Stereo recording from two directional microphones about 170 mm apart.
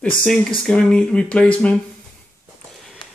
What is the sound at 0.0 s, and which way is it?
Speech, 5° left (ahead or behind).